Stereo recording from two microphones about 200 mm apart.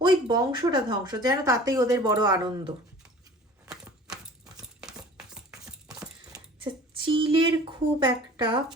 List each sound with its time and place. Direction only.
0.0 s speech: 20° right (ahead or behind)
4.0 s clip-clop: 20° right (ahead or behind)
4.8 s a sound: 5° right (ahead or behind)
7.0 s speech: 25° right (ahead or behind)